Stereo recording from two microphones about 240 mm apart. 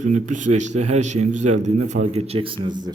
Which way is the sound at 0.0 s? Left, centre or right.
Right.